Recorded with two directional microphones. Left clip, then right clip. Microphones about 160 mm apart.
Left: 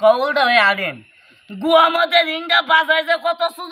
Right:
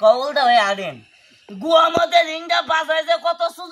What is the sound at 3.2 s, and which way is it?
Speech, 20° left (ahead or behind).